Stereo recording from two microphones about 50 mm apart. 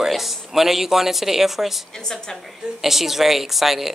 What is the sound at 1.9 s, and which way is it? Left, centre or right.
Speech, centre.